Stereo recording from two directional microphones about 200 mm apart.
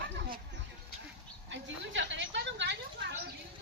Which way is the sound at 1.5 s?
65° right (ahead or behind).